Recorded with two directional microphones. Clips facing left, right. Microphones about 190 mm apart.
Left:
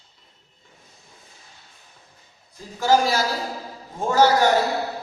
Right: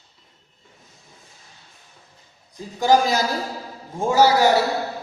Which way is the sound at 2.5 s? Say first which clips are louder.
Right 2 dB; 15° right (ahead or behind).